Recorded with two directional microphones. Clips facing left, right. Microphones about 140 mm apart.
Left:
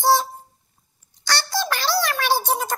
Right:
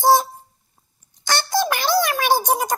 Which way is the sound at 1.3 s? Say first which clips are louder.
Right 4 dB; 20° right (ahead or behind).